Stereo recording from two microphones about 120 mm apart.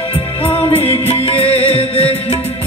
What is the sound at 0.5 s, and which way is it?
Music, 55° left (ahead or behind).